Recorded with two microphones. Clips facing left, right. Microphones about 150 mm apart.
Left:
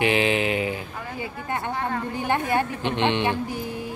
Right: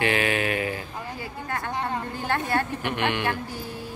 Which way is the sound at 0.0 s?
20° left (ahead or behind).